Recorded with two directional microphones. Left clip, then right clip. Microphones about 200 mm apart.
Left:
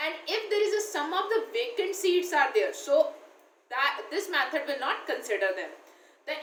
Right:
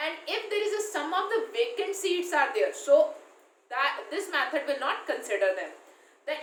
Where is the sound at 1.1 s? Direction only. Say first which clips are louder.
Right 1 dB; 15° right (ahead or behind).